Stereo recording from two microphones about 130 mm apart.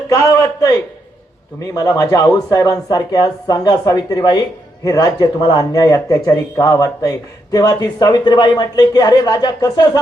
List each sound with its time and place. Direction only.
0.1 s speech: 25° left (ahead or behind)